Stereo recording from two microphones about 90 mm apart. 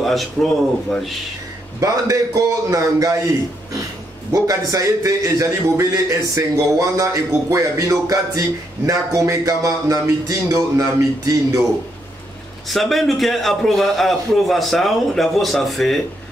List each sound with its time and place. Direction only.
0.0 s a man's voice: centre (ahead or behind)
1.8 s a man's voice: 35° right (ahead or behind)
12.6 s a man's voice: centre (ahead or behind)